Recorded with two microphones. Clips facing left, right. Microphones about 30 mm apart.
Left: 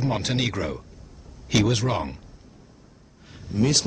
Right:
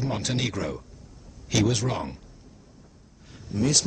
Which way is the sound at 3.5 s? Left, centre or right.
Centre.